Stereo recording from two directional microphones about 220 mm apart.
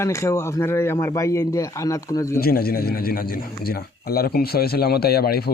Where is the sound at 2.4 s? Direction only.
45° left (ahead or behind).